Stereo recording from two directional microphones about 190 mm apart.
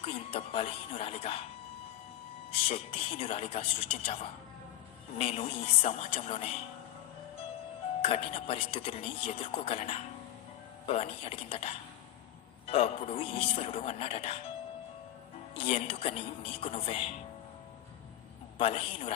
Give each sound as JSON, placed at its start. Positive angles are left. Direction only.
{"t": 0.0, "sound": "speech", "side_deg": 30}
{"t": 2.5, "sound": "speech", "side_deg": 30}
{"t": 8.0, "sound": "speech", "side_deg": 30}
{"t": 15.5, "sound": "speech", "side_deg": 35}
{"t": 18.5, "sound": "speech", "side_deg": 30}